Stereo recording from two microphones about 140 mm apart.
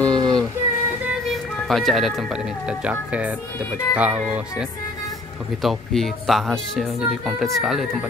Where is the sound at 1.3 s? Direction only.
Centre (ahead or behind).